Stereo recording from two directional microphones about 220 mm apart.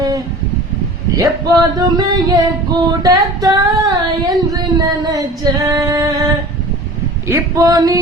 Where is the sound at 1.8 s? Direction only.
20° right (ahead or behind).